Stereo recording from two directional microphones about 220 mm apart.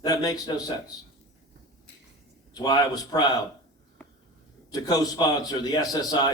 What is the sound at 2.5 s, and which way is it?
Speech, 20° left (ahead or behind).